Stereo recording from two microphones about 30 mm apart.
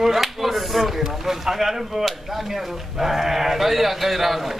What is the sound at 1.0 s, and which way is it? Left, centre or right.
A man's voice, centre.